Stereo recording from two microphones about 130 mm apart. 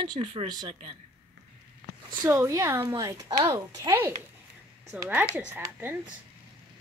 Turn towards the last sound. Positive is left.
turn(degrees=-20)  # may be behind; listen again after turning